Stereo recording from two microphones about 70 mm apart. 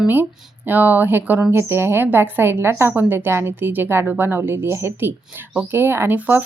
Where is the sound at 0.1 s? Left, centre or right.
Right.